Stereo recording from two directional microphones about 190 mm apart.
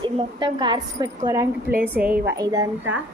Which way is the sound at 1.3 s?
15° right (ahead or behind).